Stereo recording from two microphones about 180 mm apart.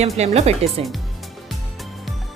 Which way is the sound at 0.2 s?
35° right (ahead or behind).